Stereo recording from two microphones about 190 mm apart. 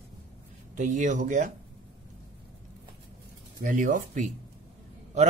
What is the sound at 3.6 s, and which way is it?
Speech, 45° right (ahead or behind).